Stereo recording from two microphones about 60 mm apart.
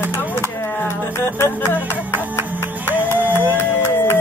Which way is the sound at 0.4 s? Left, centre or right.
Left.